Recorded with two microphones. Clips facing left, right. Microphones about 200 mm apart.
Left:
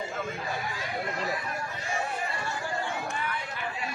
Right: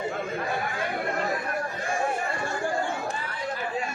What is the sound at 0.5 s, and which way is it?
Chatter, 55° right (ahead or behind).